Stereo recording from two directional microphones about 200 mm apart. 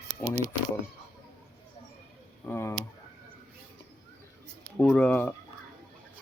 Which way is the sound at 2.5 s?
10° left (ahead or behind).